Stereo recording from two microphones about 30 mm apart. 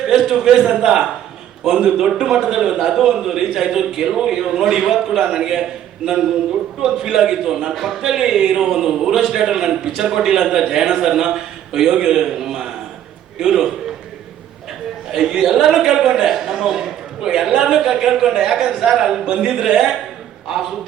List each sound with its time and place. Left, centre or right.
0.1 s a sound: centre
0.8 s a man's voice: centre
15.1 s a man's voice: centre
17.2 s a man's voice: right